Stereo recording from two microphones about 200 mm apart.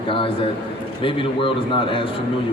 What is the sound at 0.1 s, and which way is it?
A man's voice, 25° left (ahead or behind).